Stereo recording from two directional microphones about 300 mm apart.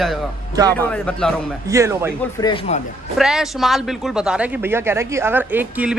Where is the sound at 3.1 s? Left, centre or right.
Centre.